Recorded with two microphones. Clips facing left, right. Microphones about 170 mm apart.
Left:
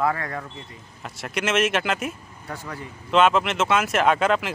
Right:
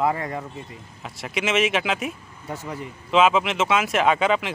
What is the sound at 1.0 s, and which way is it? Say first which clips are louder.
Speech: even; centre (ahead or behind).